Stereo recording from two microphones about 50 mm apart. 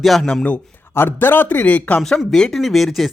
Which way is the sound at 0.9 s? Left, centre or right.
Left.